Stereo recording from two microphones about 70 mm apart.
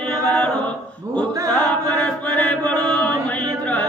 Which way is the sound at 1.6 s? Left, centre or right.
Centre.